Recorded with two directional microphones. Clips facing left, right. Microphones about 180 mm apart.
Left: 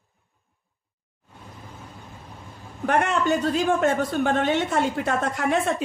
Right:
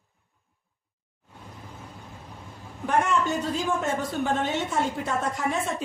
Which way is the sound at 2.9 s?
70° left (ahead or behind).